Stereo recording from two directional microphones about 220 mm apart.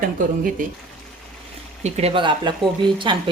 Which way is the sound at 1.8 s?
30° right (ahead or behind).